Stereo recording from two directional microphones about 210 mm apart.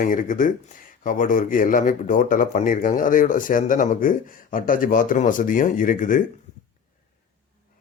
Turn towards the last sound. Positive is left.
turn(degrees=40)  # may be behind; listen again after turning